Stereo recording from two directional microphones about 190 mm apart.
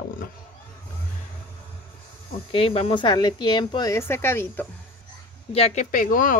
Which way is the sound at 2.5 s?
30° left (ahead or behind).